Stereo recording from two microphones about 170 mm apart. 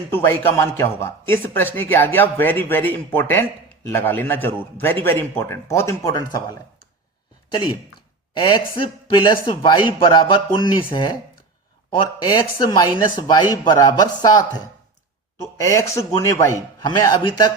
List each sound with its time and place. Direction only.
0.1 s a man's voice: 15° left (ahead or behind)
8.3 s a man's voice: 30° left (ahead or behind)
15.6 s a man's voice: 15° left (ahead or behind)